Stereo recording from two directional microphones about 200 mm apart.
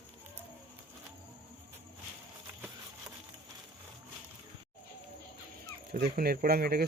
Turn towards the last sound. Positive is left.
turn(degrees=-50)  # may be behind; listen again after turning